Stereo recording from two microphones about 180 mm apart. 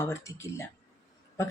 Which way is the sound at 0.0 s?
15° left (ahead or behind).